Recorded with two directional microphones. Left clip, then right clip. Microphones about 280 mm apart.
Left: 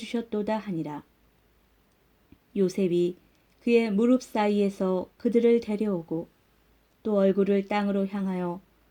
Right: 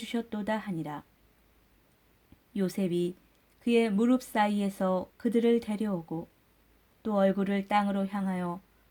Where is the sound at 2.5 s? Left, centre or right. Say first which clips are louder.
Left 6 dB; right.